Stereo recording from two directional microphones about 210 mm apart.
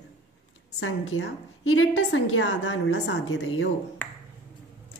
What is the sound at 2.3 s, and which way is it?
A woman's voice, 60° left (ahead or behind).